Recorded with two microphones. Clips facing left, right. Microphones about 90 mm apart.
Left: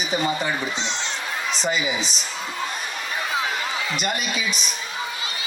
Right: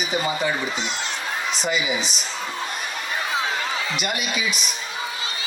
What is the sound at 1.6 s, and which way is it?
Speech, 40° left (ahead or behind).